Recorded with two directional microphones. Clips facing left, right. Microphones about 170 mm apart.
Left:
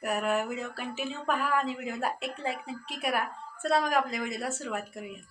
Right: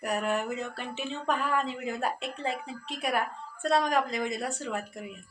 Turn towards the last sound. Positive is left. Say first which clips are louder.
# right 1 dB
turn(degrees=5)  # may be behind; listen again after turning